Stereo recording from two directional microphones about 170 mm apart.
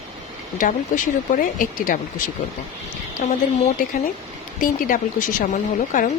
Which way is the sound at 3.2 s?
55° left (ahead or behind).